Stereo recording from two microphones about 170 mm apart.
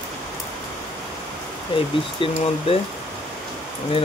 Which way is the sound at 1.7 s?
30° left (ahead or behind).